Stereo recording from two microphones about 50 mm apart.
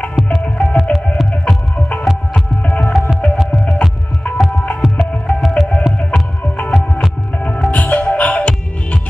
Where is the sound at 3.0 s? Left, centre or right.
Centre.